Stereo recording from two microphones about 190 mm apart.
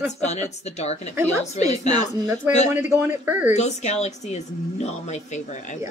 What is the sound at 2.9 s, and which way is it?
Speech, 10° right (ahead or behind).